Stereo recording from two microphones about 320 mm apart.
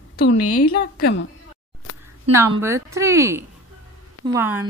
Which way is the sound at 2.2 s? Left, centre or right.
Centre.